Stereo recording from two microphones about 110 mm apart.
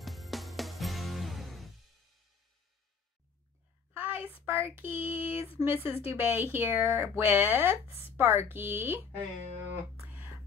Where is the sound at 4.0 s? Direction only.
20° right (ahead or behind).